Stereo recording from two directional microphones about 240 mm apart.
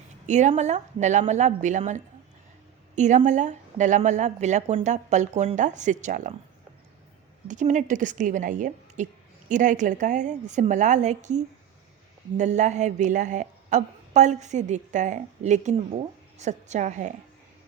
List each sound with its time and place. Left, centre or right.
0.3 s speech: right
7.4 s a woman's voice: right